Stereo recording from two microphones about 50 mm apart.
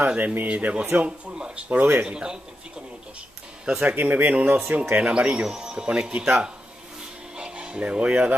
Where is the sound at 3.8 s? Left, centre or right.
Right.